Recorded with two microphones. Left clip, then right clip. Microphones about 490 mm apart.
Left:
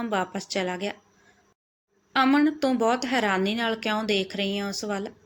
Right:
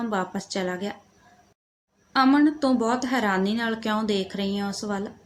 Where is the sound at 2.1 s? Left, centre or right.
Right.